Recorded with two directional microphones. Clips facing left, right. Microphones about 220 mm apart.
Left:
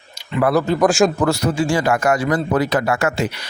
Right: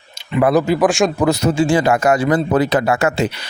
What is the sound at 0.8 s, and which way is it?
Speech, centre (ahead or behind).